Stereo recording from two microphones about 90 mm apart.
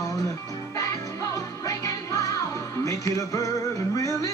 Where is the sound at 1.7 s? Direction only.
40° left (ahead or behind).